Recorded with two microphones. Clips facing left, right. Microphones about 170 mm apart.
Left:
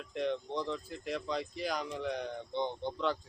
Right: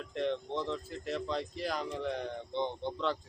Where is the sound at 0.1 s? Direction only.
Centre (ahead or behind).